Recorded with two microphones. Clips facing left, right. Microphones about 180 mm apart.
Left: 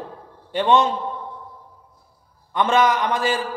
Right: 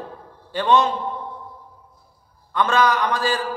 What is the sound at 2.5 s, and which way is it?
Speech, 20° left (ahead or behind).